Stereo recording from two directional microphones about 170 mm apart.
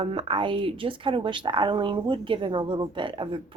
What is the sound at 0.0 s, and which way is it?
A woman's voice, 30° right (ahead or behind).